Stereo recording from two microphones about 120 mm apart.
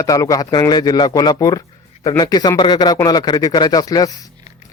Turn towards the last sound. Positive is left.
turn(degrees=30)  # may be behind; listen again after turning